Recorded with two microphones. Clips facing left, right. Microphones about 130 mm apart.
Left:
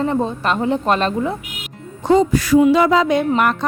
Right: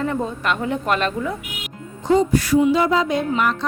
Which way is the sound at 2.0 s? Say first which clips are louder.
Left 3 dB; 90° left.